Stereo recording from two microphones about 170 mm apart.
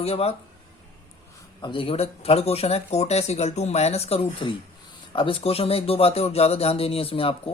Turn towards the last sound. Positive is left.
turn(degrees=35)  # may be behind; listen again after turning